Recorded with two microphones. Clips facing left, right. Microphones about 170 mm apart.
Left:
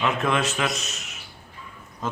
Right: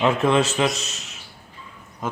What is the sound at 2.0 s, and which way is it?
Speech, 10° right (ahead or behind).